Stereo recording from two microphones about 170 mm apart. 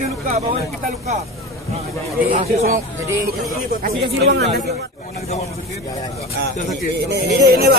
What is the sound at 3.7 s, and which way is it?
Speech, 60° right (ahead or behind).